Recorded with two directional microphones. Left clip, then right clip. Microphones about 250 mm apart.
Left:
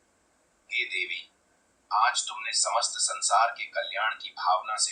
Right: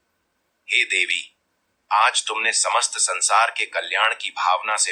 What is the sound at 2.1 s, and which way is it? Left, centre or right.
Speech, right.